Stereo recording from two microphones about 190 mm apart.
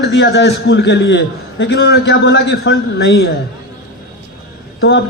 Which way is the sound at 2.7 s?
60° left (ahead or behind).